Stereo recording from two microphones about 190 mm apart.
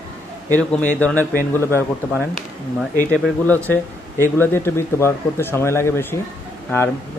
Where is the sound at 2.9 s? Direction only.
5° left (ahead or behind).